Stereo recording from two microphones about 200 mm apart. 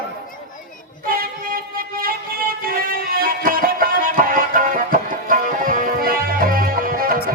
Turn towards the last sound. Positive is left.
turn(degrees=-45)  # may be behind; listen again after turning